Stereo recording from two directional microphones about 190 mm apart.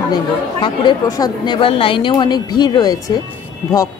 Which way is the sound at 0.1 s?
25° left (ahead or behind).